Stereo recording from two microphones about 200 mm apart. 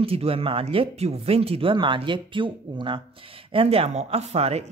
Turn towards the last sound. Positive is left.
turn(degrees=-30)  # may be behind; listen again after turning